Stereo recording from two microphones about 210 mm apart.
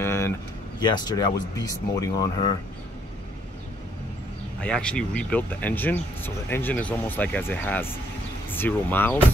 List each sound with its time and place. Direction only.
0.0 s a sound: 10° left (ahead or behind)
0.7 s speech: 20° left (ahead or behind)
4.6 s speech: 5° left (ahead or behind)